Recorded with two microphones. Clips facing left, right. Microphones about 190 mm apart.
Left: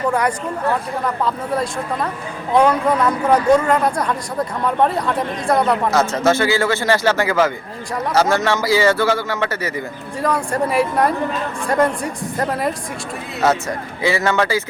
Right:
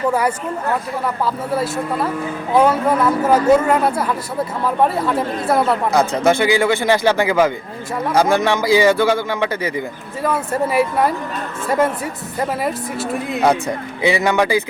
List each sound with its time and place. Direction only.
0.1 s speech: 5° right (ahead or behind)
6.1 s speech: 15° right (ahead or behind)
10.2 s speech: 5° right (ahead or behind)
13.4 s speech: 15° right (ahead or behind)